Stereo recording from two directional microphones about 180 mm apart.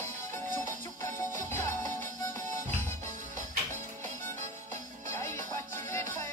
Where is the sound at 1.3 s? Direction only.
45° right (ahead or behind).